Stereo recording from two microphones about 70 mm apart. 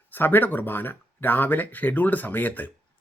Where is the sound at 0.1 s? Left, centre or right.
Left.